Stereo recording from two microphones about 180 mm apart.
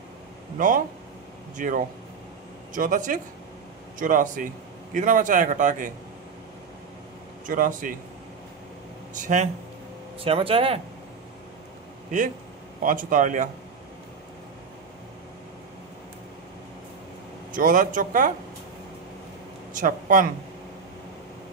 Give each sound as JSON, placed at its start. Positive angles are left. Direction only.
{"t": 0.6, "sound": "a man's voice", "side_deg": -45}
{"t": 7.4, "sound": "a man's voice", "side_deg": -50}
{"t": 9.2, "sound": "a man's voice", "side_deg": -45}
{"t": 10.2, "sound": "speech", "side_deg": -30}
{"t": 12.8, "sound": "a man's voice", "side_deg": -45}
{"t": 17.5, "sound": "a man's voice", "side_deg": -50}
{"t": 19.7, "sound": "speech", "side_deg": -45}